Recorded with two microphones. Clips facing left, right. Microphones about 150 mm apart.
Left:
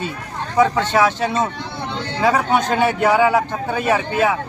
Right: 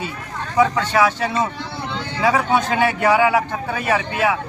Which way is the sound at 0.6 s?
Centre (ahead or behind).